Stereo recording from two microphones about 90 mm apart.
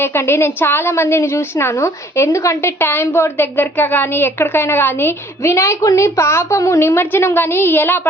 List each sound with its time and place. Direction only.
0.0 s a woman's voice: 25° left (ahead or behind)